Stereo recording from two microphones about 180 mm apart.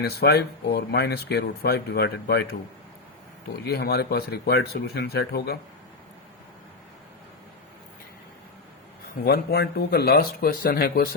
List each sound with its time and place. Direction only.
0.0 s speech: 65° left (ahead or behind)
3.6 s speech: 60° left (ahead or behind)
9.2 s speech: 65° left (ahead or behind)